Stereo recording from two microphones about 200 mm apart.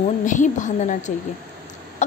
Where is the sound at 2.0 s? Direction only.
35° left (ahead or behind).